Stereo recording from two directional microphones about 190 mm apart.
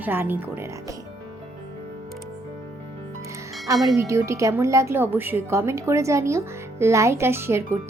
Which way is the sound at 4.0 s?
15° right (ahead or behind).